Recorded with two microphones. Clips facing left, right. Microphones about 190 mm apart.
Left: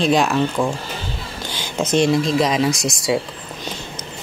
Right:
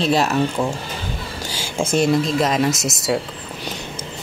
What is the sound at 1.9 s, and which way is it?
Speech, 5° right (ahead or behind).